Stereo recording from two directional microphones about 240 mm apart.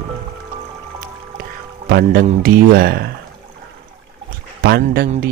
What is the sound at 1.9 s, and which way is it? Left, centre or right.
Speech, right.